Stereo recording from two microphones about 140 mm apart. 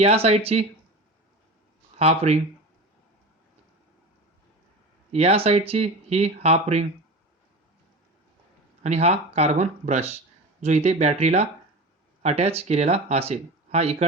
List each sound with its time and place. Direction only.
0.0 s speech: 45° right (ahead or behind)
2.0 s speech: 50° right (ahead or behind)
5.1 s speech: 45° right (ahead or behind)
8.8 s speech: 50° right (ahead or behind)